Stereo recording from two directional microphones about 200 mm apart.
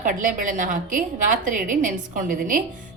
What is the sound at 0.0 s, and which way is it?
A woman's voice, 40° right (ahead or behind).